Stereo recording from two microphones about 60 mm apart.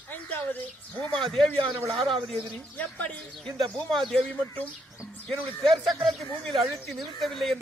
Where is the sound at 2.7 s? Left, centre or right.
Left.